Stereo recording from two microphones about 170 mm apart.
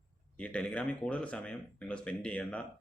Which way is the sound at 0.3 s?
5° left (ahead or behind).